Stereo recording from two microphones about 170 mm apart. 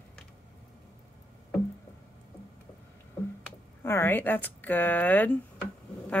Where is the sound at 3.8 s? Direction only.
15° left (ahead or behind).